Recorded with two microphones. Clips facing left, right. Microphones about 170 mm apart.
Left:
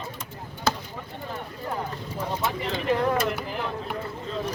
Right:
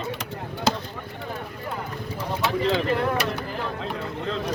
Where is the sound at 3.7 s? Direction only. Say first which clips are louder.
Right 2 dB; 90° right.